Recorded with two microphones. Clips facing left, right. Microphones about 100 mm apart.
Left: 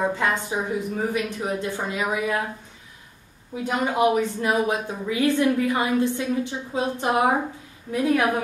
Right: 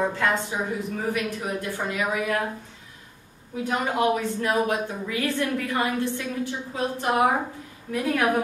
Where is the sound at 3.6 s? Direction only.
20° left (ahead or behind).